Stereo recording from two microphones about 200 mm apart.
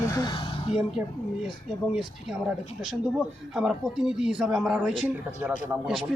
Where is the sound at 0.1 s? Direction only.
20° left (ahead or behind).